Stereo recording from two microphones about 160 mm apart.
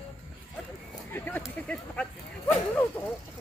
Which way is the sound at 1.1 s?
10° left (ahead or behind).